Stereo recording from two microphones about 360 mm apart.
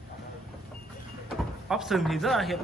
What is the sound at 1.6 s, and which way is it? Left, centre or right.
Speech, centre.